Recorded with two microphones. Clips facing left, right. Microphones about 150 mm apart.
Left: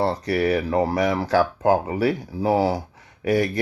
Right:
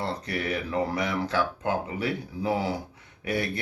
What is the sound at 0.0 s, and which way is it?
Mantra, 40° left (ahead or behind).